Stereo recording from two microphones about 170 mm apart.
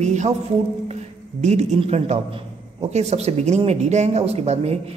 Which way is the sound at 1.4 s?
40° right (ahead or behind).